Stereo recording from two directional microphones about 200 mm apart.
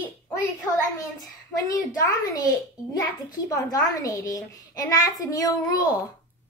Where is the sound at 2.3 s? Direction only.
15° left (ahead or behind).